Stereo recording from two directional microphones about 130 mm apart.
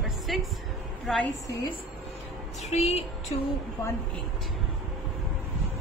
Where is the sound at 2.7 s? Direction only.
55° left (ahead or behind).